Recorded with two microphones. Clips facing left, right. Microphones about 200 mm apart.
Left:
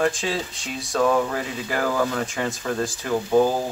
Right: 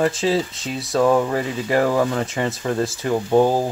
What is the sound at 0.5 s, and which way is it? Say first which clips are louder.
Speech: right 4 dB; 5° right (ahead or behind).